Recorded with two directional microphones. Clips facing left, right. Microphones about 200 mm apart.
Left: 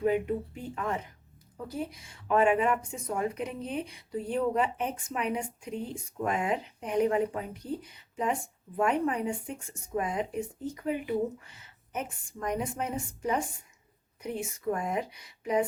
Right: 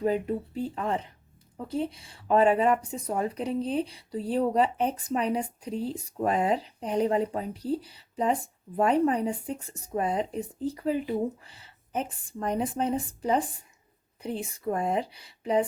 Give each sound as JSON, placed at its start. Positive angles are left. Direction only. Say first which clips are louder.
{"t": 0.0, "sound": "speech", "louder": "even", "side_deg": -35}